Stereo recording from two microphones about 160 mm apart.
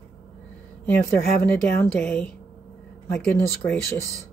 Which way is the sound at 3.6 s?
10° left (ahead or behind).